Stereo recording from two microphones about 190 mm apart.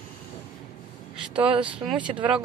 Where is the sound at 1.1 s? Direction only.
5° right (ahead or behind).